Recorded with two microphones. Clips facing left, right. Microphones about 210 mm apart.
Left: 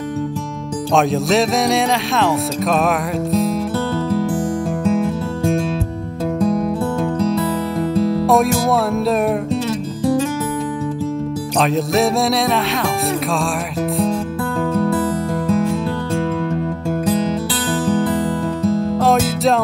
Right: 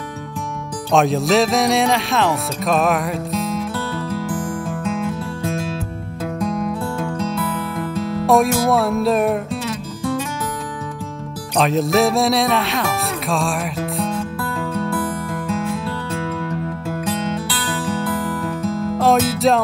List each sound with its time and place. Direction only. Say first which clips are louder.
0.9 s speech: even; centre (ahead or behind)
4.8 s music: left 6 dB; 35° left (ahead or behind)
6.4 s music: left 5 dB; 35° left (ahead or behind)
8.3 s speech: right 3 dB; centre (ahead or behind)
11.5 s speech: right 1 dB; centre (ahead or behind)
17.1 s music: left 5 dB; 35° left (ahead or behind)
18.7 s music: left 5 dB; 30° left (ahead or behind)
18.9 s music: even; centre (ahead or behind)